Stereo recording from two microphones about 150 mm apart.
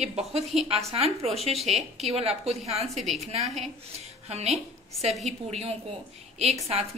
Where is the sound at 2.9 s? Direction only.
Centre (ahead or behind).